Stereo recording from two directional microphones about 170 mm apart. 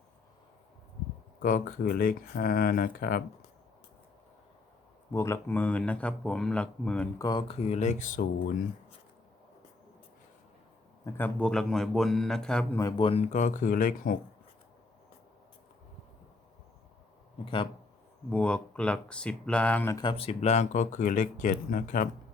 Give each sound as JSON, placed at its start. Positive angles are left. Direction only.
{"t": 1.4, "sound": "speech", "side_deg": 55}
{"t": 5.1, "sound": "speech", "side_deg": 15}
{"t": 7.2, "sound": "speech", "side_deg": 25}
{"t": 7.6, "sound": "speech", "side_deg": 45}
{"t": 11.0, "sound": "a man's voice", "side_deg": 10}
{"t": 13.0, "sound": "speech", "side_deg": 35}
{"t": 17.4, "sound": "speech", "side_deg": 30}
{"t": 18.3, "sound": "speech", "side_deg": 5}
{"t": 20.0, "sound": "speech", "side_deg": 30}